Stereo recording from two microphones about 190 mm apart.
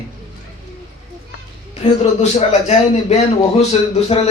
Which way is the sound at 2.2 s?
35° left (ahead or behind).